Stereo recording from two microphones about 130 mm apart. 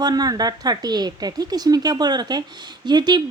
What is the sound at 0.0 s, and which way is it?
A woman's voice, 30° right (ahead or behind).